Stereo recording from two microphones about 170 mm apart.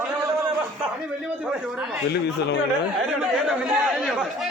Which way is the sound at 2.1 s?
80° left.